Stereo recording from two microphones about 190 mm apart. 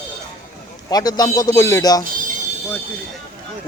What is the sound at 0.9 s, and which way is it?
Speech, 20° left (ahead or behind).